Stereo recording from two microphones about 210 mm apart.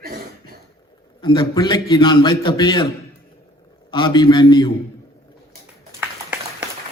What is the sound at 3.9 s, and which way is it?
Speech, 20° left (ahead or behind).